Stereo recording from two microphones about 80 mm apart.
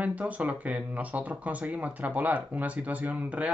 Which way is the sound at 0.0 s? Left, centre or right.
Centre.